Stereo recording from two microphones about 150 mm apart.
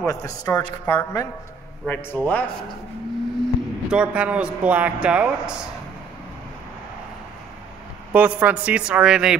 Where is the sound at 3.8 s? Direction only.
5° right (ahead or behind).